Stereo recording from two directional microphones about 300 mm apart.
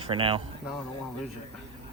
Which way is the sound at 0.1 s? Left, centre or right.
Centre.